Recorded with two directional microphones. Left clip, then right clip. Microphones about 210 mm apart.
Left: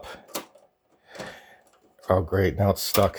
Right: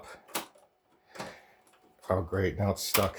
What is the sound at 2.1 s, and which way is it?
Speech, 40° left (ahead or behind).